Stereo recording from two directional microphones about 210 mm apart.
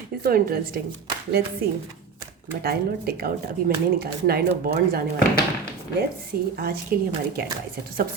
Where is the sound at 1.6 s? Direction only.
45° right (ahead or behind).